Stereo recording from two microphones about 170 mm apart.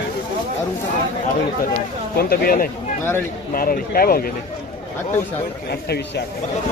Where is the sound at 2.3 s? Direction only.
60° left (ahead or behind).